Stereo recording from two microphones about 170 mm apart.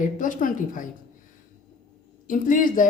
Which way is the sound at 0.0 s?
50° left (ahead or behind).